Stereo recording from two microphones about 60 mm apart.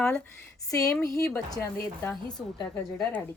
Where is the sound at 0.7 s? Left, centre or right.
Left.